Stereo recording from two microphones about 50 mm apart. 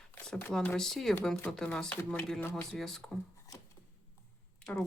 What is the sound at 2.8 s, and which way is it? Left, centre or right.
Speech, centre.